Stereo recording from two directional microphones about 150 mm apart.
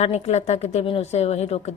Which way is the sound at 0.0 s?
45° left (ahead or behind).